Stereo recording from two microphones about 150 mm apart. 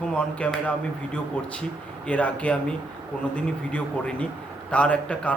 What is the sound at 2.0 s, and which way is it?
A man's voice, 10° left (ahead or behind).